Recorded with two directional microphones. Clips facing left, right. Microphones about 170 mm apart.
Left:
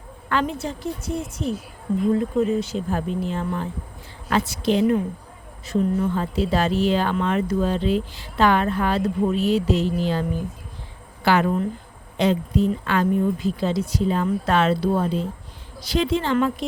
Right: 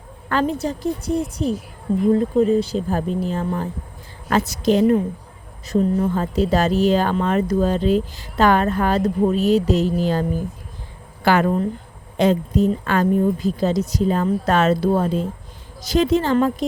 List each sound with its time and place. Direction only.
0.3 s speech: 40° right (ahead or behind)